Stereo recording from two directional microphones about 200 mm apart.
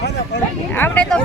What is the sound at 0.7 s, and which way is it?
Speech, 10° left (ahead or behind).